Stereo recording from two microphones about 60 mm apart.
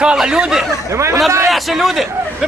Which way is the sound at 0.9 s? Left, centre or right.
Right.